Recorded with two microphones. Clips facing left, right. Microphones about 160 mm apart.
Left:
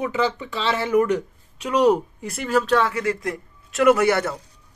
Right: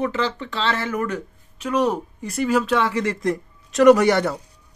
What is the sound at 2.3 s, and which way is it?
Speech, centre (ahead or behind).